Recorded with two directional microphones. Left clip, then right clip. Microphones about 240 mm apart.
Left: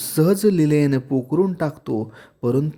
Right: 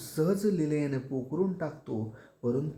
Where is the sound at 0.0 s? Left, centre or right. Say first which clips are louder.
Left 11 dB; left.